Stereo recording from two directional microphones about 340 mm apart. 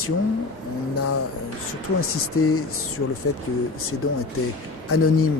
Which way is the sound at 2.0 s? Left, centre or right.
Left.